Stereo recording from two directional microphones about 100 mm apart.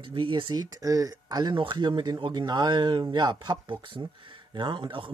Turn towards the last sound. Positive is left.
turn(degrees=-55)  # may be behind; listen again after turning